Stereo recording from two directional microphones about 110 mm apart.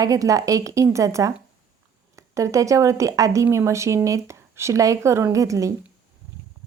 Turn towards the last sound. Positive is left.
turn(degrees=-30)  # may be behind; listen again after turning